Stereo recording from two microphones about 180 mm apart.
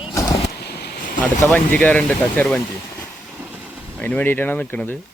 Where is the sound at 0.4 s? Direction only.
65° left (ahead or behind).